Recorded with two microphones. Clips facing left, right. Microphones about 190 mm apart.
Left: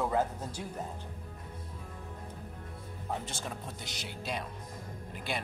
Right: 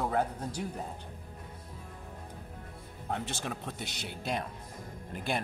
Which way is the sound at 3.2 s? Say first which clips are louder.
Right 3 dB; 65° right (ahead or behind).